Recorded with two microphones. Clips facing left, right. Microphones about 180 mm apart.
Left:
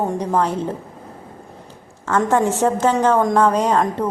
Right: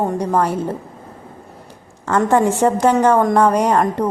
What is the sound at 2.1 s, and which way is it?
A woman's voice, 15° right (ahead or behind).